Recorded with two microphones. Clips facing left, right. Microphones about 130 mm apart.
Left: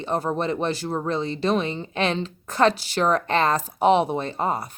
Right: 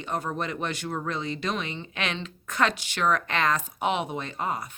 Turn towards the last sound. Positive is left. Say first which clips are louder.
# left 5 dB
turn(degrees=35)  # may be behind; listen again after turning